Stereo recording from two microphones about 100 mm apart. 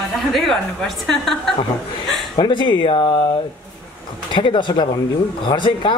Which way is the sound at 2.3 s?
50° left (ahead or behind).